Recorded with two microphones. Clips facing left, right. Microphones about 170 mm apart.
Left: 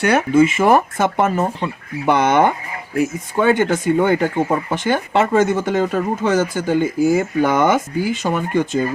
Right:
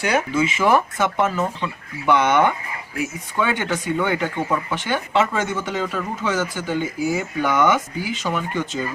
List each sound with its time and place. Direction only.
0.0 s speech: 60° left (ahead or behind)